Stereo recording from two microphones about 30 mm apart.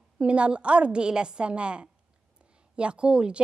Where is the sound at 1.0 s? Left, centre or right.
Right.